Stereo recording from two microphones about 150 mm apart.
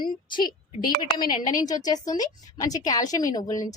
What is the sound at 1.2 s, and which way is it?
Speech, 70° left (ahead or behind).